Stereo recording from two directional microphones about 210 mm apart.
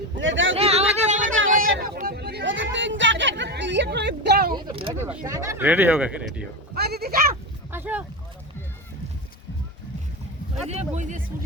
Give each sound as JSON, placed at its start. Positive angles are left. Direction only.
{"t": 0.2, "sound": "speech", "side_deg": -65}
{"t": 0.5, "sound": "a sound", "side_deg": -30}
{"t": 4.5, "sound": "a sound", "side_deg": -25}
{"t": 4.9, "sound": "speech", "side_deg": -10}
{"t": 6.7, "sound": "sheep", "side_deg": -50}
{"t": 7.7, "sound": "boat", "side_deg": -10}
{"t": 10.7, "sound": "speech", "side_deg": -35}